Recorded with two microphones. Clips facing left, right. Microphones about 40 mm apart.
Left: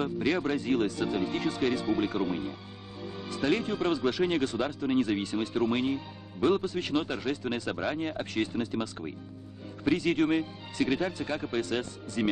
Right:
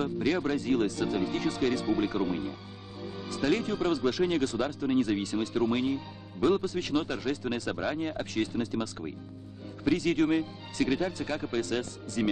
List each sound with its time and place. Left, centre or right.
0.0 s speech: centre